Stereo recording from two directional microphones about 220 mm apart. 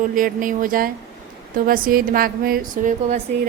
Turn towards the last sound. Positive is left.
turn(degrees=-35)  # may be behind; listen again after turning